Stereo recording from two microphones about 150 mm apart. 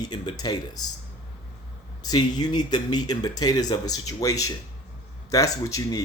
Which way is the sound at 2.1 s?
30° left (ahead or behind).